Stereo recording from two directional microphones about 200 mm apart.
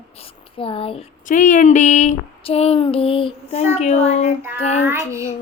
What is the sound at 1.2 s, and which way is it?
Speech, 40° left (ahead or behind).